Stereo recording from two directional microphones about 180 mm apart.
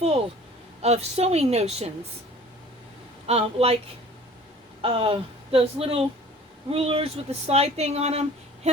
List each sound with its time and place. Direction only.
0.8 s speech: 35° right (ahead or behind)
3.2 s speech: 35° right (ahead or behind)
4.8 s speech: 30° right (ahead or behind)